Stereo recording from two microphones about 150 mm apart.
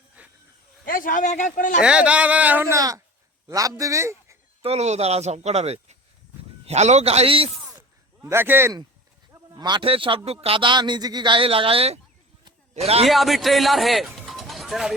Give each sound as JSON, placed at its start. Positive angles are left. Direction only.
{"t": 0.2, "sound": "snake", "side_deg": -10}
{"t": 0.9, "sound": "a man's voice", "side_deg": 65}
{"t": 1.8, "sound": "speech", "side_deg": -5}
{"t": 4.6, "sound": "speech", "side_deg": -45}
{"t": 7.8, "sound": "a sound", "side_deg": -15}
{"t": 9.6, "sound": "a man's voice", "side_deg": -30}
{"t": 13.1, "sound": "a man's voice", "side_deg": 0}
{"t": 14.3, "sound": "a sound", "side_deg": 0}